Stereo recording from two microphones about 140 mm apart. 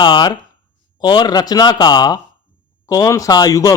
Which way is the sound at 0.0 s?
30° left (ahead or behind).